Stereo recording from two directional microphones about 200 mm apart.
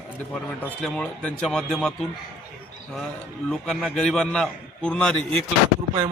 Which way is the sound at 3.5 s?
5° left (ahead or behind).